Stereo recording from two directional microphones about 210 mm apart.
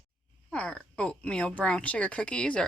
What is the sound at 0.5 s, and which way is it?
Speech, 5° left (ahead or behind).